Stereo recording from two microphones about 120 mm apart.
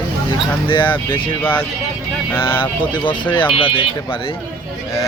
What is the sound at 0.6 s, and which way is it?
Speech, 40° left (ahead or behind).